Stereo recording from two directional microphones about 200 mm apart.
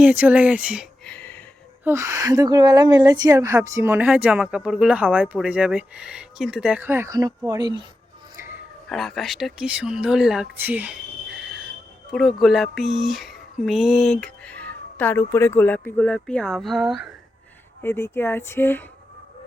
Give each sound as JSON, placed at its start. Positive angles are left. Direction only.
{"t": 0.0, "sound": "speech", "side_deg": -10}
{"t": 1.8, "sound": "a woman's voice", "side_deg": -15}
{"t": 8.9, "sound": "speech", "side_deg": 0}
{"t": 17.8, "sound": "speech", "side_deg": 10}